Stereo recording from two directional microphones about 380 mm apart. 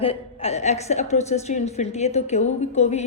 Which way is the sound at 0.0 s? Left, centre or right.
Centre.